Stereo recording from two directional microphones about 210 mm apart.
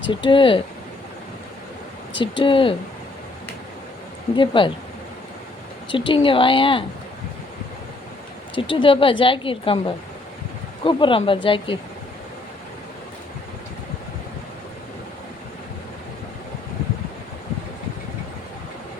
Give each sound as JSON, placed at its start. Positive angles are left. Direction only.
{"t": 0.1, "sound": "a woman's voice", "side_deg": 25}
{"t": 2.4, "sound": "a woman's voice", "side_deg": 25}
{"t": 4.4, "sound": "a woman's voice", "side_deg": 25}
{"t": 5.9, "sound": "a woman's voice", "side_deg": 25}
{"t": 8.7, "sound": "a woman's voice", "side_deg": 25}
{"t": 10.8, "sound": "a woman's voice", "side_deg": 25}